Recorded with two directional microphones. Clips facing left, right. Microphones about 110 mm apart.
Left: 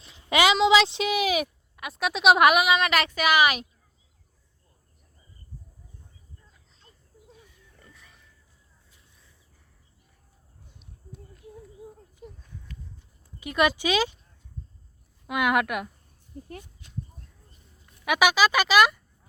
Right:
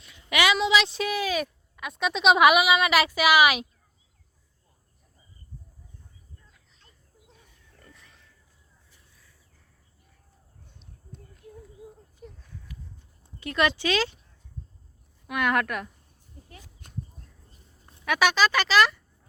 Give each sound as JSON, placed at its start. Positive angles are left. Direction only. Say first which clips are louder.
{"t": 0.0, "sound": "speech", "louder": "left 3 dB", "side_deg": 30}
{"t": 1.7, "sound": "speech", "louder": "even", "side_deg": 5}
{"t": 7.3, "sound": "pig", "louder": "left 5 dB", "side_deg": 5}
{"t": 13.4, "sound": "speech", "louder": "left 1 dB", "side_deg": 15}
{"t": 15.3, "sound": "speech", "louder": "left 2 dB", "side_deg": 15}
{"t": 16.8, "sound": "a sound", "louder": "right 1 dB", "side_deg": -50}
{"t": 18.0, "sound": "speech", "louder": "left 1 dB", "side_deg": 10}